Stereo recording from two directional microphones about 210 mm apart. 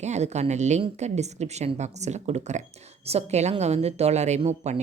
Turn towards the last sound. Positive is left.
turn(degrees=-30)  # may be behind; listen again after turning